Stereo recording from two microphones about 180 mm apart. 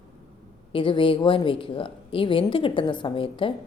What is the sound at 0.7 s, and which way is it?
A woman's voice, 30° left (ahead or behind).